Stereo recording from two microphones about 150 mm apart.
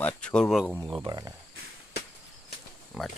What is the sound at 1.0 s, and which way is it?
Speech, 25° right (ahead or behind).